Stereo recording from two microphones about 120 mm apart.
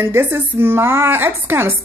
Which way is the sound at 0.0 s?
20° right (ahead or behind).